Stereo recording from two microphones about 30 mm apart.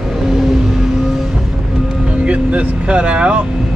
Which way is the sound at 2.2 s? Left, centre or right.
Right.